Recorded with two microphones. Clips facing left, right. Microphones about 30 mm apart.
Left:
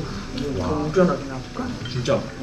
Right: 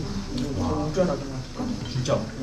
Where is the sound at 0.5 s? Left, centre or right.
Left.